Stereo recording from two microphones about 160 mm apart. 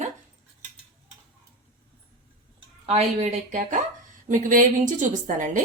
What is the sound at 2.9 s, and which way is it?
A woman's voice, 40° right (ahead or behind).